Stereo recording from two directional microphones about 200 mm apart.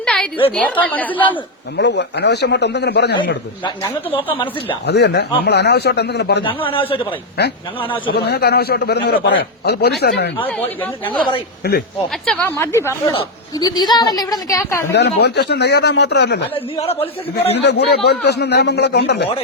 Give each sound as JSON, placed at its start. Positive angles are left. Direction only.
{"t": 0.0, "sound": "a sound", "side_deg": 0}
{"t": 0.5, "sound": "a woman's voice", "side_deg": 10}
{"t": 1.7, "sound": "a man's voice", "side_deg": 60}
{"t": 4.1, "sound": "a woman's voice", "side_deg": 25}
{"t": 4.9, "sound": "a man's voice", "side_deg": 55}
{"t": 6.4, "sound": "a woman's voice", "side_deg": 25}
{"t": 8.1, "sound": "a man's voice", "side_deg": 55}
{"t": 11.0, "sound": "a woman's voice", "side_deg": 25}
{"t": 11.6, "sound": "a man's voice", "side_deg": 55}
{"t": 12.2, "sound": "a woman's voice", "side_deg": 5}
{"t": 14.9, "sound": "a man's voice", "side_deg": 55}
{"t": 16.7, "sound": "a woman's voice", "side_deg": 30}
{"t": 17.6, "sound": "a man's voice", "side_deg": 55}